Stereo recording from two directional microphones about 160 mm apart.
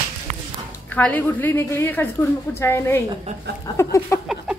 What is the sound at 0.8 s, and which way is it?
Speech, 10° left (ahead or behind).